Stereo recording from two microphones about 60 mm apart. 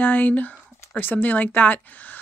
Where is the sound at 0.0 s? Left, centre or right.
Left.